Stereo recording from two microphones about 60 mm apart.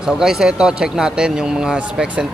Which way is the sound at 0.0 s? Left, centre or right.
Centre.